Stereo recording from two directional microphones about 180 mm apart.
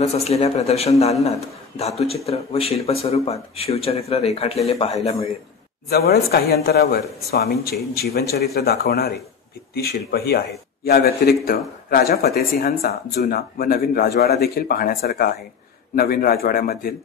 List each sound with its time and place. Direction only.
0.1 s speech: 35° left (ahead or behind)
5.9 s a man's voice: 60° left (ahead or behind)